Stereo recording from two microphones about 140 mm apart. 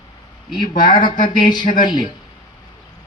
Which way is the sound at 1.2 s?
30° left (ahead or behind).